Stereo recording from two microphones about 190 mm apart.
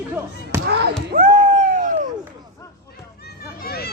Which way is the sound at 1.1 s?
40° right (ahead or behind).